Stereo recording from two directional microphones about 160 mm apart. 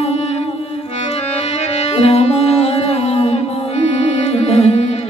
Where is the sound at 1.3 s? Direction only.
40° left (ahead or behind).